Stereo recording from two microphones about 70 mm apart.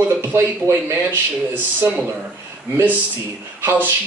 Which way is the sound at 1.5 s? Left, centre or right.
Right.